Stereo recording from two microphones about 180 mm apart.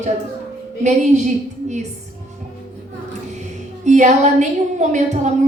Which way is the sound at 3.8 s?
40° right (ahead or behind).